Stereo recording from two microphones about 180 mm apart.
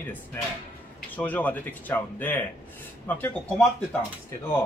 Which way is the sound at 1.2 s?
10° left (ahead or behind).